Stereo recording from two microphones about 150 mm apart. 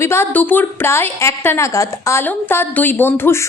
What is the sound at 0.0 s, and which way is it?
A woman's voice, 15° left (ahead or behind).